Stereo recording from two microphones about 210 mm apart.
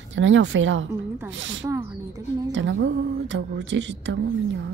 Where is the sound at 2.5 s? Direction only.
60° right (ahead or behind).